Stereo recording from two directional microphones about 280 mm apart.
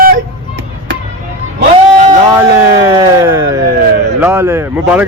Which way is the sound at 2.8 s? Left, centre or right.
Centre.